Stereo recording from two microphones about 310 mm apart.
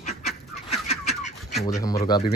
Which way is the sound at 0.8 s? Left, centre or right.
Left.